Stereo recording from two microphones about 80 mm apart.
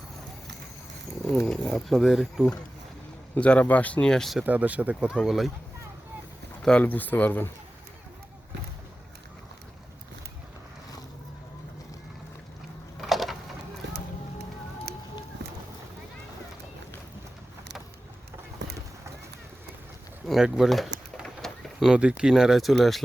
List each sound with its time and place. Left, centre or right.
1.5 s speech: centre
3.3 s speech: centre
4.4 s speech: right
5.2 s speech: centre
6.6 s speech: centre
6.8 s speech: left
13.0 s a sound: centre
20.4 s bird: centre
21.8 s speech: centre